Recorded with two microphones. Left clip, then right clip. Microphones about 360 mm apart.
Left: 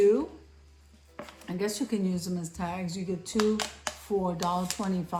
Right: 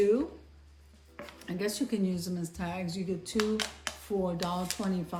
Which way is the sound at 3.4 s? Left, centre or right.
Centre.